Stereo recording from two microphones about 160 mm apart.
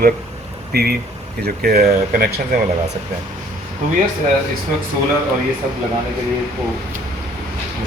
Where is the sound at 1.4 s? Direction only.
70° right (ahead or behind).